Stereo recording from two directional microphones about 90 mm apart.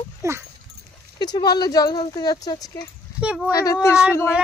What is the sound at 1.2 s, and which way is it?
Speech, 50° left (ahead or behind).